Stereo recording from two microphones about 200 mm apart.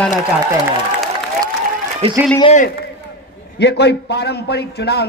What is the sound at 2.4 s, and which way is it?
Speech, 35° left (ahead or behind).